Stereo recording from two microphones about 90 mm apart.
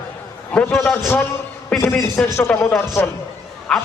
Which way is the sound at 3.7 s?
5° left (ahead or behind).